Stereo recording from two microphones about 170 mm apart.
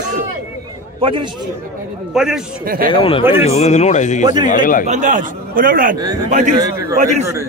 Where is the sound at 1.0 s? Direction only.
30° right (ahead or behind).